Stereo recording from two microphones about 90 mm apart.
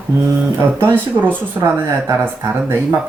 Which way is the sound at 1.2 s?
20° right (ahead or behind).